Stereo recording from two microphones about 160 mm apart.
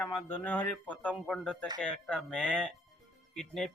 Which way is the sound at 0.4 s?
10° left (ahead or behind).